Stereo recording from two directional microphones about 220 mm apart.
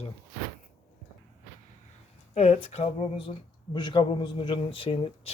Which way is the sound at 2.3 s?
25° left (ahead or behind).